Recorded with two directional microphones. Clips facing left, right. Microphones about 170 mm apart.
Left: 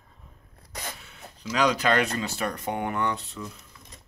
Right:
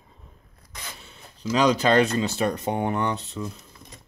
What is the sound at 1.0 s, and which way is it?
Speech, 30° right (ahead or behind).